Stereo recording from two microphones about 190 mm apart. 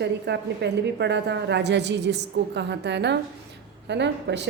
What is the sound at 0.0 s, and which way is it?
Speech, 65° right (ahead or behind).